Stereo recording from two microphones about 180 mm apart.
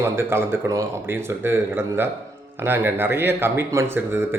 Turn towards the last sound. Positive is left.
turn(degrees=-10)  # may be behind; listen again after turning